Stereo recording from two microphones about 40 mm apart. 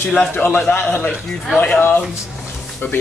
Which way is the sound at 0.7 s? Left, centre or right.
Left.